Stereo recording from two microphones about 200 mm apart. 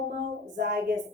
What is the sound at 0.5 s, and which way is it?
Speech, 55° right (ahead or behind).